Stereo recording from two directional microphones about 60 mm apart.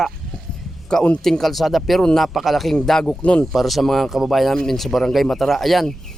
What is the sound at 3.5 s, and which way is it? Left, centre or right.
Speech, centre.